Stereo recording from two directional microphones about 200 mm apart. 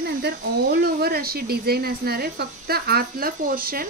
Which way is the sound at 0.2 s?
50° right (ahead or behind).